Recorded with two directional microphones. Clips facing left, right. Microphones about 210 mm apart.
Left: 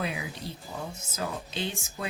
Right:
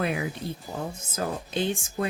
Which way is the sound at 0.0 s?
55° right (ahead or behind).